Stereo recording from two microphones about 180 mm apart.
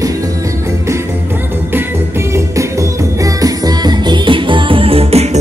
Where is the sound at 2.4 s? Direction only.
15° right (ahead or behind).